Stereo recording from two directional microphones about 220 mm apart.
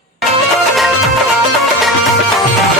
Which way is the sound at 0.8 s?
Centre (ahead or behind).